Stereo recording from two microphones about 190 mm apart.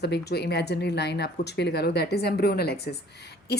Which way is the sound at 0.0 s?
60° left (ahead or behind).